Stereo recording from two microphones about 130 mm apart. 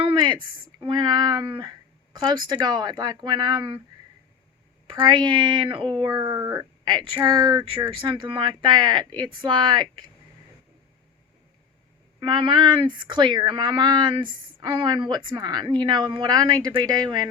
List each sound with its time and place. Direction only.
0.0 s a sound: 40° right (ahead or behind)
0.8 s speech: 35° right (ahead or behind)
4.9 s speech: 35° right (ahead or behind)
12.2 s speech: 35° right (ahead or behind)